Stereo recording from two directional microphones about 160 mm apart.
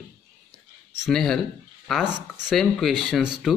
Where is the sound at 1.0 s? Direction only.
Centre (ahead or behind).